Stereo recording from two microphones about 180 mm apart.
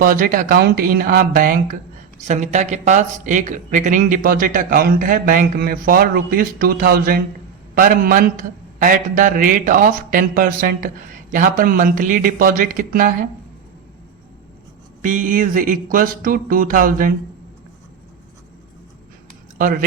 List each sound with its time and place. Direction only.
0.0 s a man's voice: 50° right (ahead or behind)
2.1 s a man's voice: 40° right (ahead or behind)
15.0 s a man's voice: 45° right (ahead or behind)
19.5 s speech: 50° right (ahead or behind)